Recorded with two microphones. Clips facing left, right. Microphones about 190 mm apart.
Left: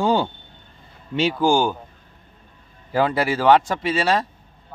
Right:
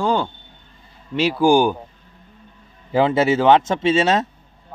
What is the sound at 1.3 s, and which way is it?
Speech, 15° right (ahead or behind).